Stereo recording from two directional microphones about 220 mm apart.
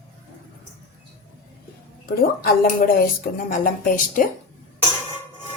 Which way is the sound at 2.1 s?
45° left (ahead or behind).